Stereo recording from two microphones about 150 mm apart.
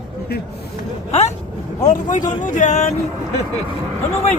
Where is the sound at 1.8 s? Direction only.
55° left (ahead or behind).